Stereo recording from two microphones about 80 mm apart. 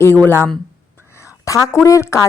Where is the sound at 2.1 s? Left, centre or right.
Left.